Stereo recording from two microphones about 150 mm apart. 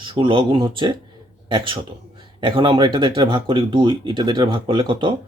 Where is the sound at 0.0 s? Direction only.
35° right (ahead or behind).